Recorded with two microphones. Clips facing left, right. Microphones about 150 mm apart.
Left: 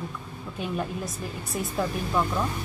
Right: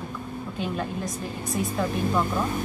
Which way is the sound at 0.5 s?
5° left (ahead or behind).